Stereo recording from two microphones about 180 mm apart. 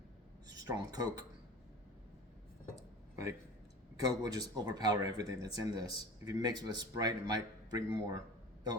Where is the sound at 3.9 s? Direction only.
20° right (ahead or behind).